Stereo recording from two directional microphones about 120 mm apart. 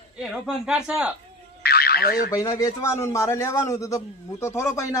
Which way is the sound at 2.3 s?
30° left (ahead or behind).